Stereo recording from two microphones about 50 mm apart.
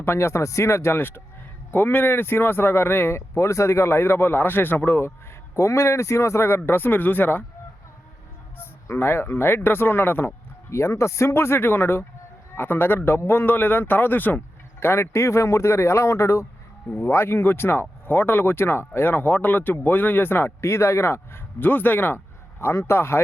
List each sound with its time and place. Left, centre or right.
0.0 s a man's voice: left
3.2 s a man's voice: left
5.5 s speech: left
6.7 s speech: left
8.9 s speech: left
10.7 s a man's voice: left
14.8 s speech: left
17.0 s speech: left
20.6 s speech: left
21.6 s speech: left
22.6 s a man's voice: left